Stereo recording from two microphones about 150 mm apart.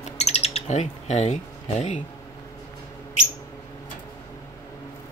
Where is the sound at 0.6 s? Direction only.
50° left (ahead or behind).